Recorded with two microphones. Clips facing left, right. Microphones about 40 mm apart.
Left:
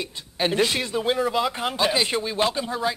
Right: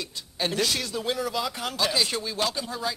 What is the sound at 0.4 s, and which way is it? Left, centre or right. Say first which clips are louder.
A man's voice: left 5 dB; left.